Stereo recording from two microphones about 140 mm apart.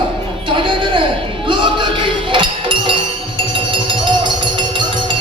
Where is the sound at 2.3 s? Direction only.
35° right (ahead or behind).